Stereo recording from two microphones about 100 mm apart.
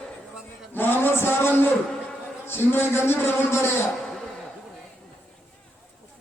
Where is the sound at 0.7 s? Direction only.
20° left (ahead or behind).